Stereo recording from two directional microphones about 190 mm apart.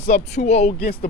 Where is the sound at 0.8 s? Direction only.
50° left (ahead or behind).